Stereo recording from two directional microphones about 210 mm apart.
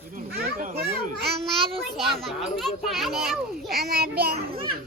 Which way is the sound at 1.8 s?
Centre (ahead or behind).